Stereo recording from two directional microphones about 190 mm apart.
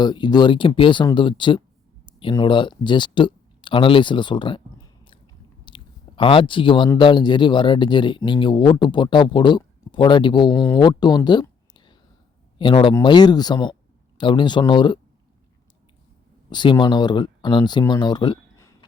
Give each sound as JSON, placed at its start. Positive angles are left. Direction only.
{"t": 0.0, "sound": "speech", "side_deg": 20}
{"t": 16.5, "sound": "speech", "side_deg": 25}